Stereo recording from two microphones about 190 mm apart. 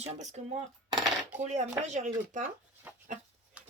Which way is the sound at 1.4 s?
40° right (ahead or behind).